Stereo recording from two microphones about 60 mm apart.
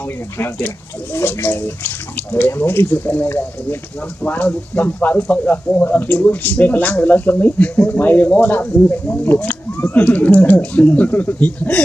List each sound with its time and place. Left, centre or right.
1.1 s speech: left
4.2 s speech: left
10.0 s speech: left